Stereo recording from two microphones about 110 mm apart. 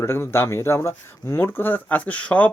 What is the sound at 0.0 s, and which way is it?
Speech, 20° left (ahead or behind).